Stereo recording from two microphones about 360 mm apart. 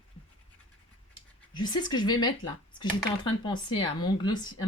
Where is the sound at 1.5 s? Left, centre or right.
Centre.